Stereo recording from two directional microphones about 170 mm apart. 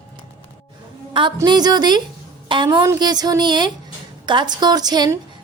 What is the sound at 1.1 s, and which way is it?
A woman's voice, 30° right (ahead or behind).